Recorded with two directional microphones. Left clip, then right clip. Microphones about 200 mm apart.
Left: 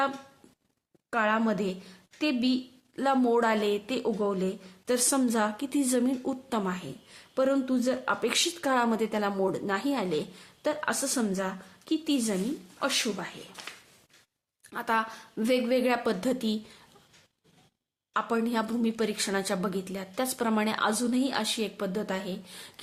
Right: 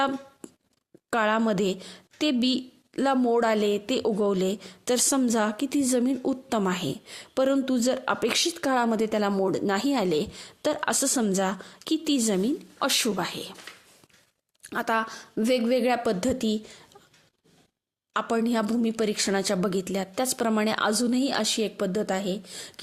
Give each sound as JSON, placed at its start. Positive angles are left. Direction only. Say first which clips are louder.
{"t": 1.1, "sound": "speech", "louder": "right 3 dB", "side_deg": -45}
{"t": 14.7, "sound": "speech", "louder": "right 2 dB", "side_deg": -35}
{"t": 18.1, "sound": "speech", "louder": "right 3 dB", "side_deg": -40}